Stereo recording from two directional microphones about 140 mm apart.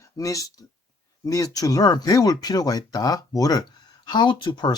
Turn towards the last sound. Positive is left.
turn(degrees=30)  # may be behind; listen again after turning